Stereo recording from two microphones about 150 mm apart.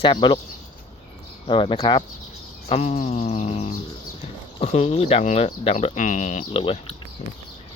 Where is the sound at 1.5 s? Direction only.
40° left (ahead or behind).